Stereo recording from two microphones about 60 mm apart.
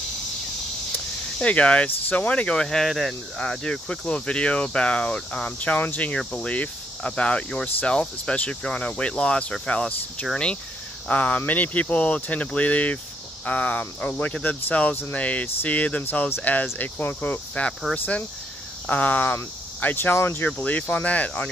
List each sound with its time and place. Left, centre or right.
1.4 s speech: left
20.4 s speech: left